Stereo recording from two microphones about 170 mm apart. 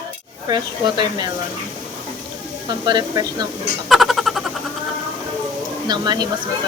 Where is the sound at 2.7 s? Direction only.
25° right (ahead or behind).